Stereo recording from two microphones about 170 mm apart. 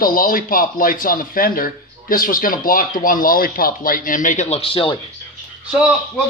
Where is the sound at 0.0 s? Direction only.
55° left (ahead or behind); by 4.9 s 35° left (ahead or behind).